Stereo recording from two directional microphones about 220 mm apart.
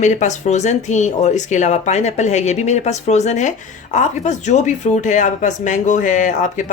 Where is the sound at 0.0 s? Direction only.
30° left (ahead or behind).